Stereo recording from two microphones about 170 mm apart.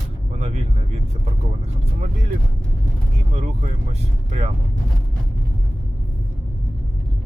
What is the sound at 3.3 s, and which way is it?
Speech, 45° right (ahead or behind).